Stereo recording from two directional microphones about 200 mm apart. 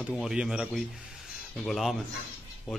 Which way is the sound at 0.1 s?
5° right (ahead or behind).